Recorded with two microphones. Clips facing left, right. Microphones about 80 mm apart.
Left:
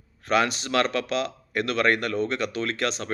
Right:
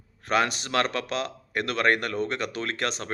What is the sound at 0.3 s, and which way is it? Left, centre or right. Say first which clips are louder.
Speech: left 2 dB; right.